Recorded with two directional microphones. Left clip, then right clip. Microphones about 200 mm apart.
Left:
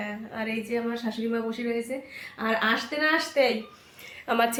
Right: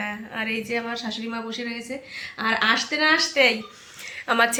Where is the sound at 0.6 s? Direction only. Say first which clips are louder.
Right 2 dB; 40° right (ahead or behind).